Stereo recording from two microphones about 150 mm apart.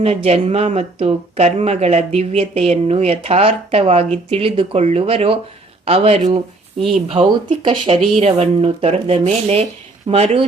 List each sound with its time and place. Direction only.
0.0 s speech: 45° right (ahead or behind)
8.1 s speech: 45° right (ahead or behind)